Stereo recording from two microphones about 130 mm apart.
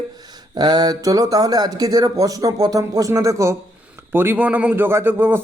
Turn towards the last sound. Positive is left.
turn(degrees=-15)  # may be behind; listen again after turning